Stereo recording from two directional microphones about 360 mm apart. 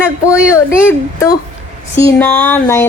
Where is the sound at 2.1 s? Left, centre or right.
Centre.